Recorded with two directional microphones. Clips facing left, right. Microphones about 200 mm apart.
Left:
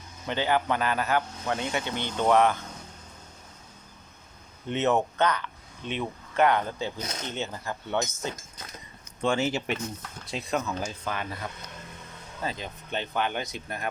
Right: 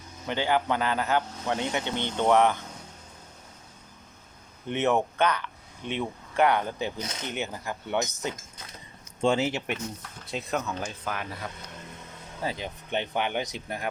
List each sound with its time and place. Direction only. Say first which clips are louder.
0.3 s speech: even; 15° right (ahead or behind)
4.7 s speech: even; 15° right (ahead or behind)
10.3 s speech: left 1 dB; centre (ahead or behind)
12.4 s speech: right 1 dB; 10° right (ahead or behind)